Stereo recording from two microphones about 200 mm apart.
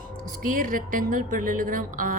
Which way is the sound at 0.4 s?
45° right (ahead or behind).